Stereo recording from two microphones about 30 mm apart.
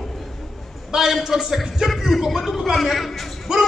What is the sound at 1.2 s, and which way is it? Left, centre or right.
Speech, centre.